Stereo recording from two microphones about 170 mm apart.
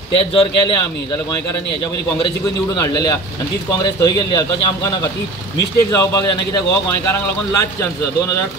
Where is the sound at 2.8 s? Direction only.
20° left (ahead or behind).